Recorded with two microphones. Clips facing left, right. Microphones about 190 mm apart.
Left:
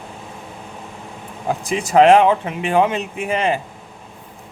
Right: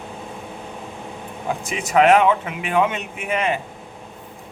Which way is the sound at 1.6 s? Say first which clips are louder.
Left 4 dB; 30° left (ahead or behind).